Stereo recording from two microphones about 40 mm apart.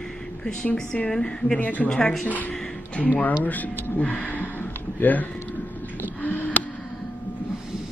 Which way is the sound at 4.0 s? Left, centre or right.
Left.